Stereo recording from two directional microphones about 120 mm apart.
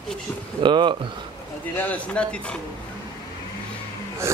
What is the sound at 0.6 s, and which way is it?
Speech, 40° right (ahead or behind).